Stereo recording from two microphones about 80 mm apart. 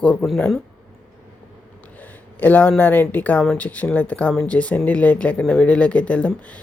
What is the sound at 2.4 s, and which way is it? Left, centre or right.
Speech, left.